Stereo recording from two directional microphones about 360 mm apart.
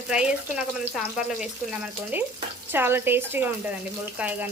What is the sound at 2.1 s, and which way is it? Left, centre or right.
Speech, centre.